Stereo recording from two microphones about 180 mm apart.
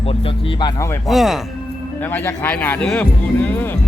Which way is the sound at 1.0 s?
Centre (ahead or behind).